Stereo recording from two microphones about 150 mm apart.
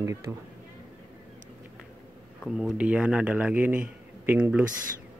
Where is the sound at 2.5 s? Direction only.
5° right (ahead or behind).